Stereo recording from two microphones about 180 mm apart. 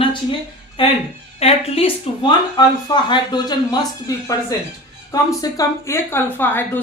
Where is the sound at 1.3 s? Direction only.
35° left (ahead or behind).